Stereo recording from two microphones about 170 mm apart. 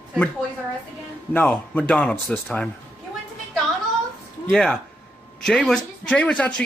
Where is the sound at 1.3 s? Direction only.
10° left (ahead or behind).